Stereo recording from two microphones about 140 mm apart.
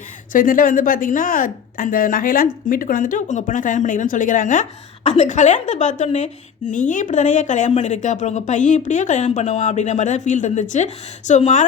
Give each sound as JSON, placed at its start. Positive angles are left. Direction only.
{"t": 0.3, "sound": "speech", "side_deg": 80}
{"t": 5.0, "sound": "a woman's voice", "side_deg": 55}